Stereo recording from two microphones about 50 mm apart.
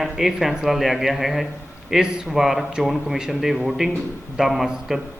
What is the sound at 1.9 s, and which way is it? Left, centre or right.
A man's voice, centre.